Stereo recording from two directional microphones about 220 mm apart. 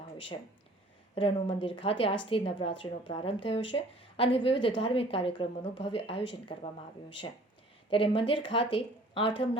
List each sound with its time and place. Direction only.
1.1 s a woman's voice: 25° left (ahead or behind)
7.9 s a woman's voice: 25° left (ahead or behind)